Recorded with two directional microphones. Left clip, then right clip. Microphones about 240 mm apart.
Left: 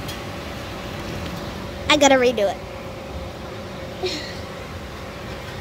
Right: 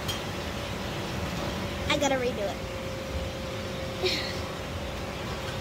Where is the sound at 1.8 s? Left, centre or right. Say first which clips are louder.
Left 12 dB; left.